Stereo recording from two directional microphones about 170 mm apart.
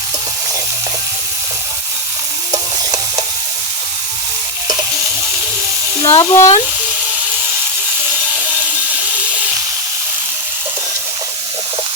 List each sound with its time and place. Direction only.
6.0 s speech: 15° left (ahead or behind)